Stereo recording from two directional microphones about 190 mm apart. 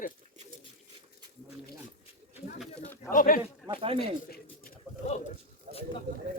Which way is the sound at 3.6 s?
30° right (ahead or behind).